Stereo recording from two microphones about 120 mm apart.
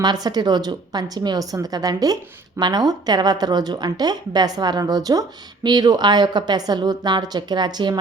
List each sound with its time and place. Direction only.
0.0 s a woman's voice: 35° right (ahead or behind)